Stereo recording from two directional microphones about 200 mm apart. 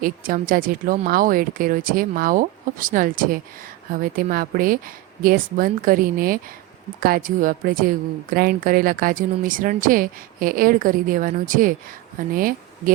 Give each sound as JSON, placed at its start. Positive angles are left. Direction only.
{"t": 0.0, "sound": "a woman's voice", "side_deg": -45}